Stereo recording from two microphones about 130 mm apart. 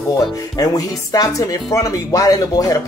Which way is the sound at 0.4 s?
25° left (ahead or behind).